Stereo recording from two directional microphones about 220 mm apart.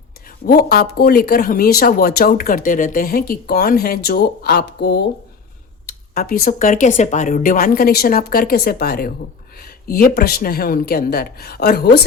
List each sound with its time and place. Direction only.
0.4 s speech: 45° left (ahead or behind)